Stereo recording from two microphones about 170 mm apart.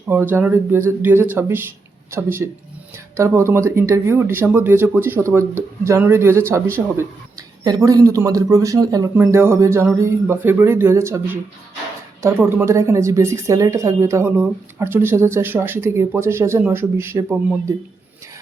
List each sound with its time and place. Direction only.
0.1 s a woman's voice: 15° right (ahead or behind)